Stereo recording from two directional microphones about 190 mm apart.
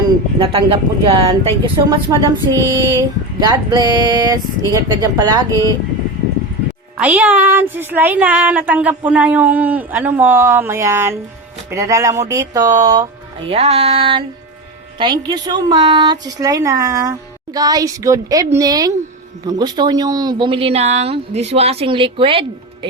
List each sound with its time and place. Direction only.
0.3 s speech: 30° right (ahead or behind)
6.9 s speech: 10° right (ahead or behind)
13.5 s music: 35° right (ahead or behind)
14.9 s speech: 25° right (ahead or behind)